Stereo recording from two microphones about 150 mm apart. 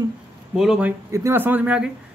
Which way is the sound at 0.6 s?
5° right (ahead or behind).